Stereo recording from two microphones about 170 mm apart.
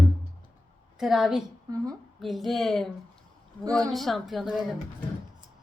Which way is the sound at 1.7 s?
20° right (ahead or behind).